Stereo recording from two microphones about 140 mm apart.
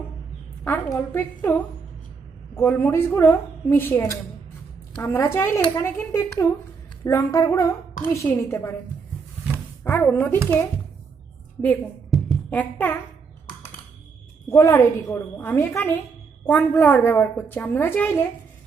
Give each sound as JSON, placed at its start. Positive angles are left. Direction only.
{"t": 0.9, "sound": "a woman's voice", "side_deg": 20}
{"t": 9.8, "sound": "a woman's voice", "side_deg": 15}
{"t": 11.6, "sound": "a woman's voice", "side_deg": 20}
{"t": 14.5, "sound": "a woman's voice", "side_deg": 20}